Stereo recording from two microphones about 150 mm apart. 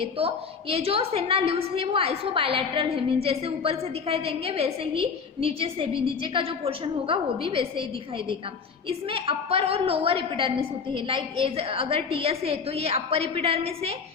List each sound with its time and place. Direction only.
0.0 s a woman's voice: 40° right (ahead or behind)
8.9 s a woman's voice: 35° right (ahead or behind)